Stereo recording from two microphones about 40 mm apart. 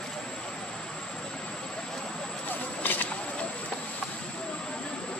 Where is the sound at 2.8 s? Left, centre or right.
Left.